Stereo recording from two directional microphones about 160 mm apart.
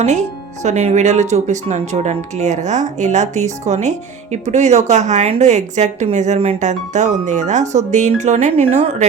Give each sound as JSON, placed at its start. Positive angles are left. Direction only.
{"t": 0.0, "sound": "speech", "side_deg": -45}